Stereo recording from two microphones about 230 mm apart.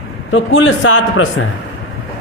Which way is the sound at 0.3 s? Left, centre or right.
Left.